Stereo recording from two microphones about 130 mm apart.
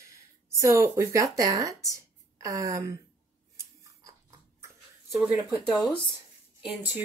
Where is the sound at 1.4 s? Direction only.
25° right (ahead or behind).